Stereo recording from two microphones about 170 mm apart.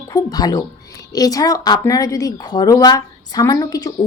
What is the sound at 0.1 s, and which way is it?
A woman's voice, 20° left (ahead or behind).